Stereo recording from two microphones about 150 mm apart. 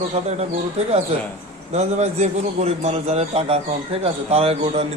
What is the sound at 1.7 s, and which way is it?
A man's voice, 45° right (ahead or behind).